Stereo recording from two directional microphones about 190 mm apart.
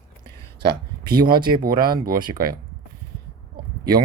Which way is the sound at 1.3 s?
25° right (ahead or behind).